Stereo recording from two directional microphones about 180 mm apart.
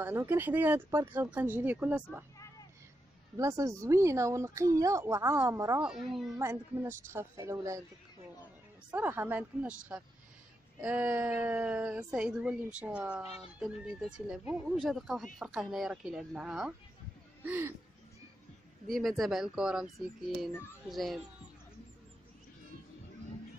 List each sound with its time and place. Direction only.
0.0 s speech: 10° right (ahead or behind)
3.3 s speech: 20° right (ahead or behind)
5.8 s speech: 5° right (ahead or behind)
6.3 s speech: 15° right (ahead or behind)
8.9 s speech: 10° right (ahead or behind)
18.9 s speech: centre (ahead or behind)
20.9 s speech: centre (ahead or behind)